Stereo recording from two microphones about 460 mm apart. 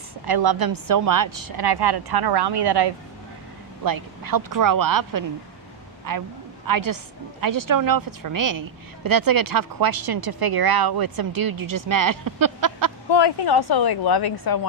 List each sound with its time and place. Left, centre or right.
0.3 s speech: right
3.8 s speech: right
6.7 s speech: right
13.1 s a woman's voice: left